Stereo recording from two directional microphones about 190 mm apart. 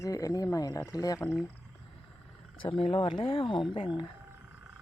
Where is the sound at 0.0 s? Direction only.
15° left (ahead or behind).